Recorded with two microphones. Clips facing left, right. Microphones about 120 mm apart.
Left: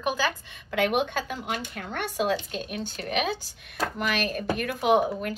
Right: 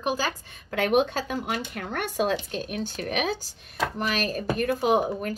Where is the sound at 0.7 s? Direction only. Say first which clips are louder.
Right 2 dB; 40° right (ahead or behind).